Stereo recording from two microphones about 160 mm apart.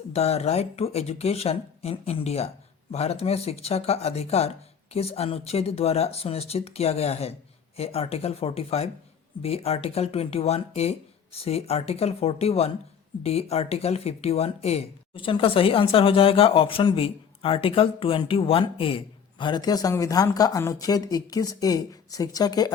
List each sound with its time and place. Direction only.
0.1 s speech: 40° left (ahead or behind); by 22.7 s 25° left (ahead or behind)